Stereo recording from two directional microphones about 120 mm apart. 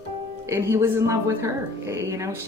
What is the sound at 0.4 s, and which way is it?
Speech, 25° right (ahead or behind).